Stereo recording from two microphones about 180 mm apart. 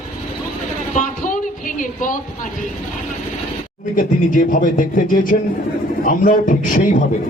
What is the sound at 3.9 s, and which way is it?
Speech, 45° left (ahead or behind).